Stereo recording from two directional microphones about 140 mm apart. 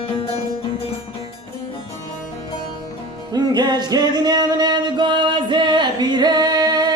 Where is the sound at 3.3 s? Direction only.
30° right (ahead or behind).